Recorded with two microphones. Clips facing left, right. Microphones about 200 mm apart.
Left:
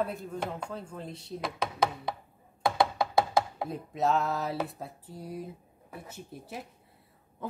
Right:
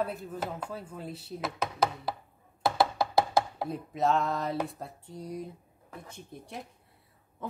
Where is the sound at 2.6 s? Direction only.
5° right (ahead or behind).